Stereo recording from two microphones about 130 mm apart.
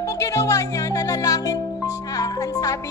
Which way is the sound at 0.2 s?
25° left (ahead or behind).